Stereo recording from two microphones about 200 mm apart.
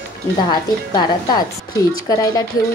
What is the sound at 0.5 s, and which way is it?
Speech, 20° left (ahead or behind).